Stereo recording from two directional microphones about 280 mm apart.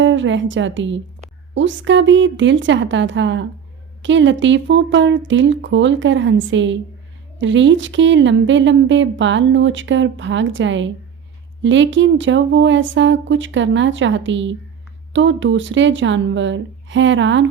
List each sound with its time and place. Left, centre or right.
0.0 s a woman's voice: right